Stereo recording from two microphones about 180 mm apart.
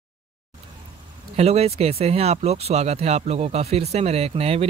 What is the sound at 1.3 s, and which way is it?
Speech, 35° right (ahead or behind).